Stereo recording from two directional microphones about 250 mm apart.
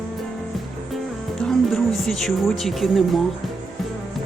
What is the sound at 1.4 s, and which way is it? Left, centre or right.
Speech, centre.